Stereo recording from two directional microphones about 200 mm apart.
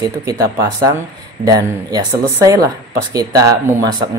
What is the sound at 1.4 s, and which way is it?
A man's voice, 20° right (ahead or behind).